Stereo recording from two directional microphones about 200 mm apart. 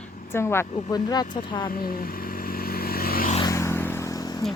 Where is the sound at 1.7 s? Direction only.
45° left (ahead or behind).